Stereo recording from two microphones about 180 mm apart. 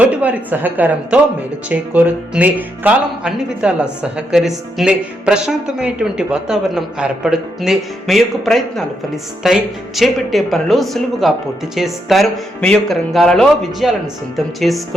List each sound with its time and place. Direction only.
0.1 s a woman's voice: 10° right (ahead or behind)